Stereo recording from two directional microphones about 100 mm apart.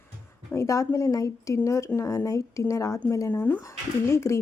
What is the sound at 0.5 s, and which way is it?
A woman's voice, 30° left (ahead or behind).